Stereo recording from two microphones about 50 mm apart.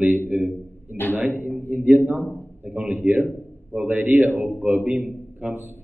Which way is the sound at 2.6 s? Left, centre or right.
Right.